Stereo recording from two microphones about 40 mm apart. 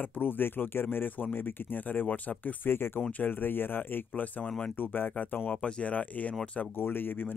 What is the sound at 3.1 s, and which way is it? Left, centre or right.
Speech, left.